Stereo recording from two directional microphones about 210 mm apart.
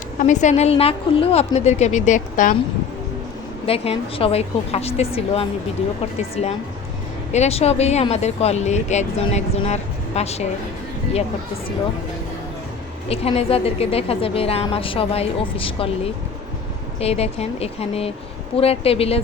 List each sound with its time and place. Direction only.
0.2 s speech: 35° left (ahead or behind)
3.7 s a woman's voice: 30° left (ahead or behind)
7.3 s speech: 30° left (ahead or behind)
13.1 s a woman's voice: 30° left (ahead or behind)
17.0 s a woman's voice: 30° left (ahead or behind)